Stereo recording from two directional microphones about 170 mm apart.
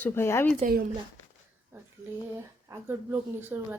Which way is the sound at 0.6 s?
65° right (ahead or behind).